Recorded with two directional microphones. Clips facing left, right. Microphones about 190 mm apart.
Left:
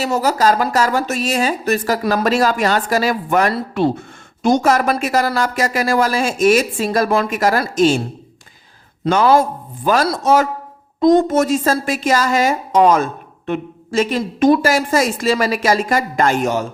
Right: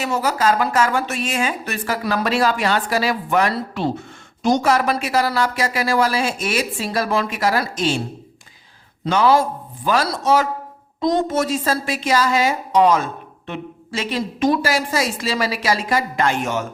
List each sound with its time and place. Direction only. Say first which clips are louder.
0.0 s a woman's voice: left 4 dB; 40° left (ahead or behind)
9.0 s a woman's voice: left 3 dB; 50° left (ahead or behind)